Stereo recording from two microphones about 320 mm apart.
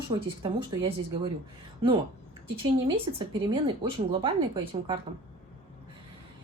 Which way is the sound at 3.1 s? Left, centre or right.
Centre.